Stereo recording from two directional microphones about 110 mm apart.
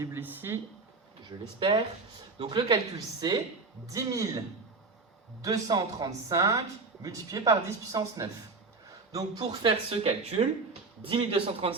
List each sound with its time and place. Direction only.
0.0 s speech: 20° right (ahead or behind)
1.5 s speech: 50° right (ahead or behind)
9.9 s speech: 65° right (ahead or behind)
11.0 s speech: 55° right (ahead or behind)